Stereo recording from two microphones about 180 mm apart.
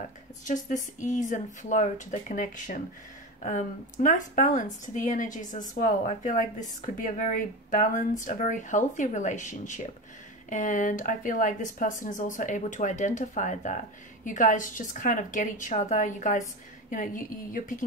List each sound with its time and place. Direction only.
0.5 s speech: 45° left (ahead or behind)